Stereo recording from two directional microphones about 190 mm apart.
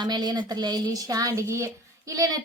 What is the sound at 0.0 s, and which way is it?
A woman's voice, 20° right (ahead or behind).